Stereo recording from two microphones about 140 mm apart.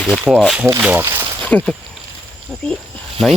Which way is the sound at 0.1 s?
Centre (ahead or behind).